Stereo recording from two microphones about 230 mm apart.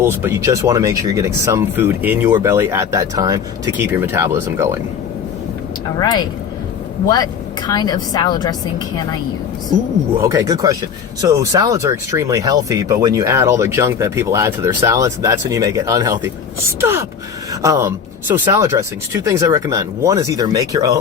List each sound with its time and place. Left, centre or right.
0.0 s speech: centre
6.0 s a woman's voice: centre
7.7 s a woman's voice: centre
10.2 s speech: centre